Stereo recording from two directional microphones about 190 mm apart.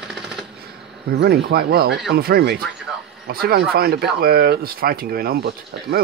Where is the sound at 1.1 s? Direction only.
55° right (ahead or behind).